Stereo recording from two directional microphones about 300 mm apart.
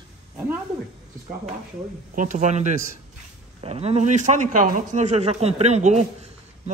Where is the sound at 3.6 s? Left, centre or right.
Right.